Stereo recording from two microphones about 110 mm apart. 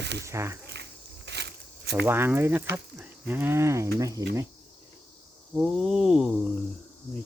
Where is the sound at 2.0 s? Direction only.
20° right (ahead or behind).